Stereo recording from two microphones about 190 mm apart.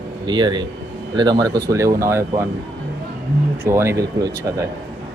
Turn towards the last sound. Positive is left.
turn(degrees=-15)  # may be behind; listen again after turning